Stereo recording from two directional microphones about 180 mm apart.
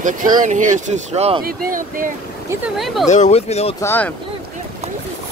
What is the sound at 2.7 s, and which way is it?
Speech, centre (ahead or behind).